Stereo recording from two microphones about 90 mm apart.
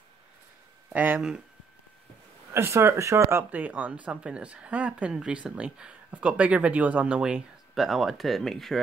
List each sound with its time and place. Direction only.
0.8 s speech: 20° right (ahead or behind)
2.5 s speech: 30° right (ahead or behind)
3.5 s speech: 15° right (ahead or behind)
7.7 s speech: centre (ahead or behind)